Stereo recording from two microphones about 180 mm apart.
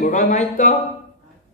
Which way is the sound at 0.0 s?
45° left (ahead or behind).